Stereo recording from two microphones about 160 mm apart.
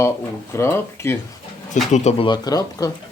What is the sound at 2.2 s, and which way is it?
Speech, 25° left (ahead or behind).